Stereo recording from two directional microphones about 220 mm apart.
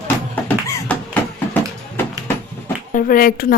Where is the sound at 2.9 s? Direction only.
40° left (ahead or behind).